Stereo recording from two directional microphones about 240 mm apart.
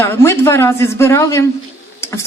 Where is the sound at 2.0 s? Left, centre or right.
Centre.